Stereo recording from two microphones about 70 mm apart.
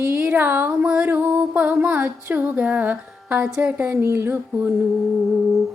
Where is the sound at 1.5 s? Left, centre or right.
Centre.